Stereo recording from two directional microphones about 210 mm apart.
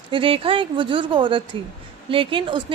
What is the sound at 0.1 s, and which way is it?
A woman's voice, 25° right (ahead or behind).